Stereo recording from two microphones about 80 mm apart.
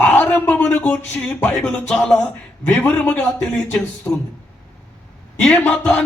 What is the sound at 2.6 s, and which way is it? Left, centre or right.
A man's voice, left.